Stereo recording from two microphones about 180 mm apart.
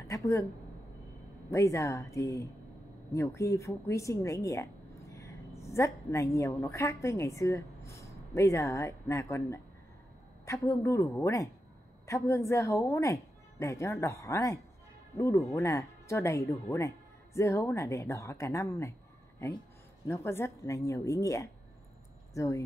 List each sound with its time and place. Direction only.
1.5 s a woman's voice: 15° left (ahead or behind)
20.1 s speech: 15° left (ahead or behind)